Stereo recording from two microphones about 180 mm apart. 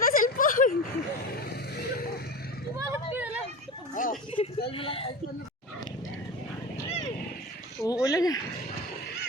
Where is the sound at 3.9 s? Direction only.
45° left (ahead or behind).